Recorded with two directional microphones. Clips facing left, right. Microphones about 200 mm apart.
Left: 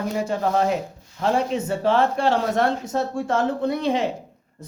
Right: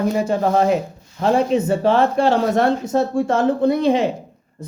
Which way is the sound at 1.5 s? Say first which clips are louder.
Right 5 dB; 10° right (ahead or behind).